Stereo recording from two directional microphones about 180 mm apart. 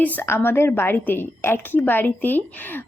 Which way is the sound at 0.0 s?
10° left (ahead or behind).